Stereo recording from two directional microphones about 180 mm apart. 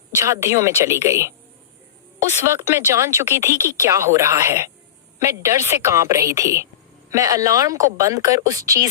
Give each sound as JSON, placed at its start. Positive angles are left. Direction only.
{"t": 0.1, "sound": "speech", "side_deg": -15}
{"t": 2.6, "sound": "speech", "side_deg": -15}